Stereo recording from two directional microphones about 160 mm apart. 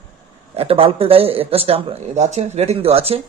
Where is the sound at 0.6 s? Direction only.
35° right (ahead or behind).